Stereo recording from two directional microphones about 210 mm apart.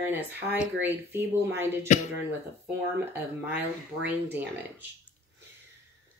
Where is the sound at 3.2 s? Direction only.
10° right (ahead or behind).